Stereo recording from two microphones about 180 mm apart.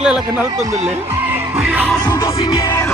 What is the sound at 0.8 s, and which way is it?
Speech, 40° right (ahead or behind).